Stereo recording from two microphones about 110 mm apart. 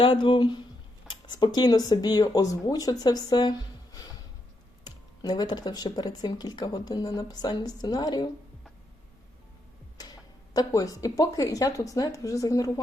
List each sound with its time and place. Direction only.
0.0 s speech: 50° left (ahead or behind)
4.8 s speech: 40° left (ahead or behind)
10.0 s tick-tock: 35° left (ahead or behind)
10.7 s speech: 30° left (ahead or behind)